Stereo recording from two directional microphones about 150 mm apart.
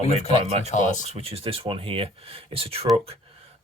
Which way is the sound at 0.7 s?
55° left (ahead or behind).